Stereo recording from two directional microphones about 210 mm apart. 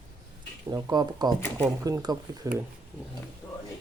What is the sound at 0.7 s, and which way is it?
Speech, 20° right (ahead or behind).